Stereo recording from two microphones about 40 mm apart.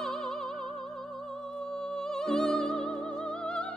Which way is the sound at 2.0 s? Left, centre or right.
Centre.